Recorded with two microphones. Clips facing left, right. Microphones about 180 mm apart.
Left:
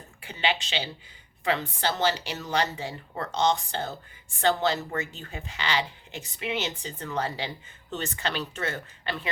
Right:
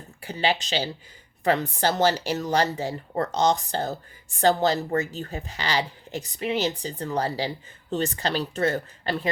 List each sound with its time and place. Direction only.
0.2 s speech: 40° right (ahead or behind)